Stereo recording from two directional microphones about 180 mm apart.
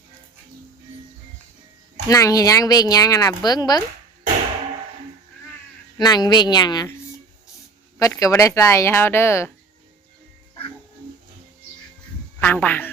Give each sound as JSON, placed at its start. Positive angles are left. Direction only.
{"t": 2.0, "sound": "a woman's voice", "side_deg": 20}
{"t": 6.0, "sound": "a woman's voice", "side_deg": 25}
{"t": 7.9, "sound": "speech", "side_deg": 20}
{"t": 12.4, "sound": "speech", "side_deg": 10}